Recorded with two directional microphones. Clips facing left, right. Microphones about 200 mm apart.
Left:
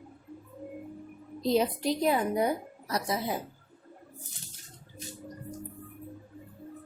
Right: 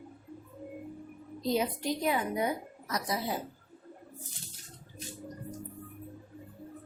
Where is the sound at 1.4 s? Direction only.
35° left (ahead or behind).